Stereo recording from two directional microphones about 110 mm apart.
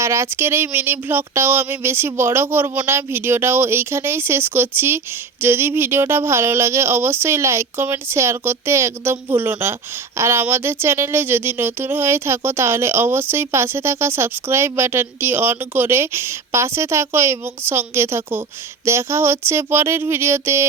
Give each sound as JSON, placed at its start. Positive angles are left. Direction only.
{"t": 0.0, "sound": "speech", "side_deg": -25}